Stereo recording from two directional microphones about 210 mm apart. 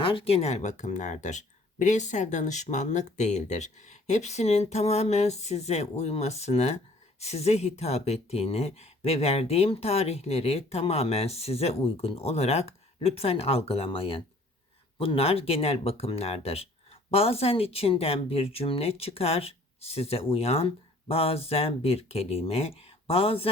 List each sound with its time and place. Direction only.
0.0 s speech: 25° left (ahead or behind)